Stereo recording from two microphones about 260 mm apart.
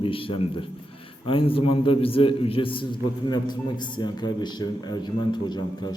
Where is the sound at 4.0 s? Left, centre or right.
Centre.